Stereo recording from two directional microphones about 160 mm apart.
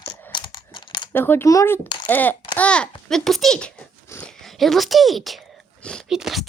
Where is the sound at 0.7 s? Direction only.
30° left (ahead or behind).